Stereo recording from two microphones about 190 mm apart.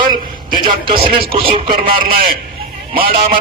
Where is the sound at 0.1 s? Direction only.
25° right (ahead or behind).